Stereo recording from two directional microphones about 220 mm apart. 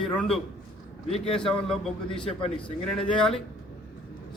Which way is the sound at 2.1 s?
25° left (ahead or behind).